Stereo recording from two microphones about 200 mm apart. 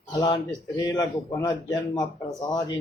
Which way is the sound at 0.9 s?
20° left (ahead or behind).